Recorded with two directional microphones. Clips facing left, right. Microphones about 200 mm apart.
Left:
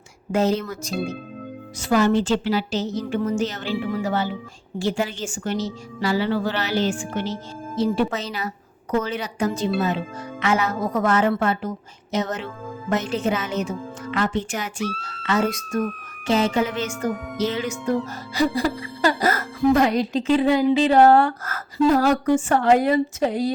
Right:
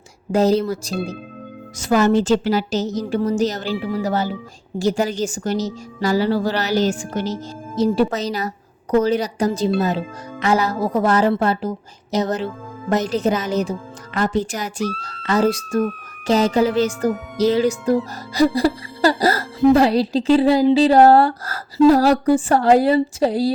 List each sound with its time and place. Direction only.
0.3 s speech: 35° right (ahead or behind)